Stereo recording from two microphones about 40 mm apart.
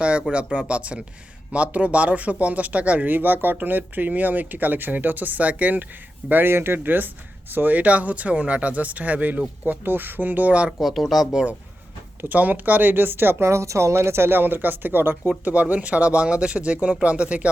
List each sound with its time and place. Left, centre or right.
0.0 s speech: right
6.4 s speech: right
6.7 s speech: right
9.6 s speech: right
10.7 s speech: centre
12.3 s speech: right
13.9 s speech: right
15.3 s speech: right